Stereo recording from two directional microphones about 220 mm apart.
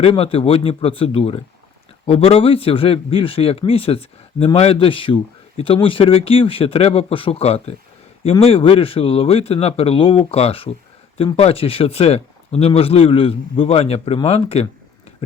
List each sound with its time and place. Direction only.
0.0 s a man's voice: 25° left (ahead or behind)